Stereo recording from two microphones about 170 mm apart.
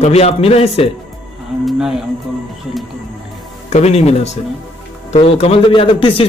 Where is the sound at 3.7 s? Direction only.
40° left (ahead or behind).